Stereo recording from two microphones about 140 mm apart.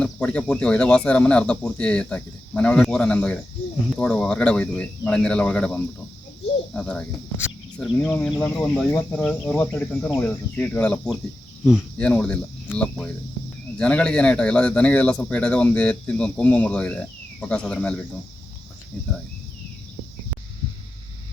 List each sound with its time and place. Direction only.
0.0 s speech: 5° left (ahead or behind)